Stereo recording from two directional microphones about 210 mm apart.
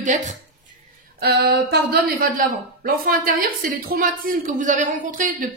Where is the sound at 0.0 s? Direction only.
35° right (ahead or behind).